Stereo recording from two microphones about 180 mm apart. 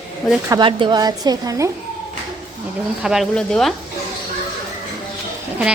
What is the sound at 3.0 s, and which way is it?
Speech, centre (ahead or behind).